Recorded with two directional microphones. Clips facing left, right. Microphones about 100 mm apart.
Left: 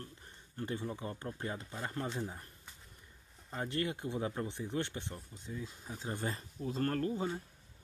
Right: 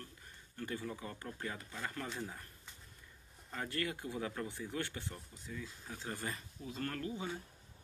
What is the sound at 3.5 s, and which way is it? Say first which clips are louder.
Speech: left 3 dB; 25° left (ahead or behind).